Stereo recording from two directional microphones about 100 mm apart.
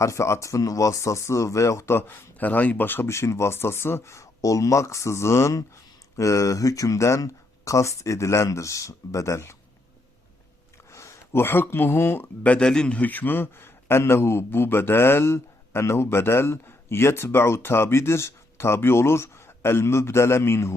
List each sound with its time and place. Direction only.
0.0 s speech: 30° left (ahead or behind)
10.9 s speech: 30° left (ahead or behind)